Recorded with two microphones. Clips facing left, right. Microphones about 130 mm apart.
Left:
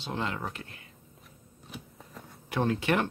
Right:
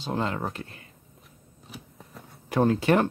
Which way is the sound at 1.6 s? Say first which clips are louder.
Even; centre (ahead or behind).